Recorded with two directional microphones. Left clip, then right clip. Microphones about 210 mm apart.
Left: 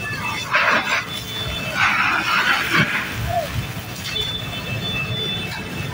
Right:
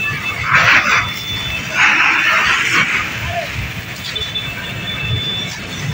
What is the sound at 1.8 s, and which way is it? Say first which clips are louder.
Music: right 6 dB; 45° left (ahead or behind).